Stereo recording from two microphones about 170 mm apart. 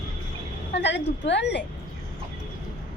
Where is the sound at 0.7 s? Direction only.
90° left.